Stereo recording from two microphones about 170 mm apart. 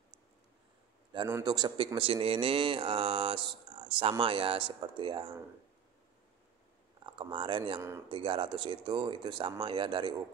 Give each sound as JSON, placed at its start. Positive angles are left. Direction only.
{"t": 1.1, "sound": "a man's voice", "side_deg": -25}
{"t": 7.1, "sound": "speech", "side_deg": -30}